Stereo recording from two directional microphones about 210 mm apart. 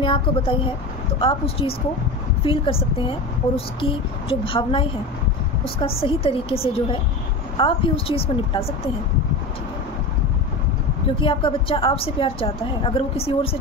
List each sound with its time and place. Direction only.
0.0 s speech: 25° left (ahead or behind)
11.1 s speech: 25° left (ahead or behind)